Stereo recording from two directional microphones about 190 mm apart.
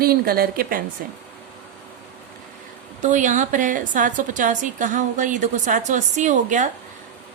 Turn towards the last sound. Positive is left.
turn(degrees=-40)  # may be behind; listen again after turning